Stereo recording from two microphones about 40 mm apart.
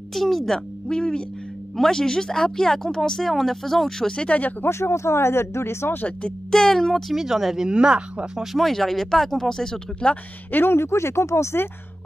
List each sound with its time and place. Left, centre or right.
0.1 s a sound: centre
0.8 s speech: centre
4.3 s speech: left
4.6 s speech: left
6.5 s speech: centre
7.2 s speech: centre
7.6 s speech: right
8.5 s speech: centre; by 10.2 s left
10.5 s speech: left
11.5 s speech: left